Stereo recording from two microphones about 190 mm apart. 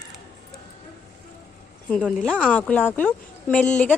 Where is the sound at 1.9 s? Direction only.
5° left (ahead or behind).